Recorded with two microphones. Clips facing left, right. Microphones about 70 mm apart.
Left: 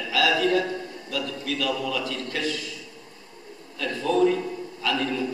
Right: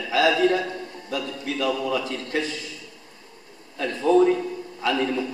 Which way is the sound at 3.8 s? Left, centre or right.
Right.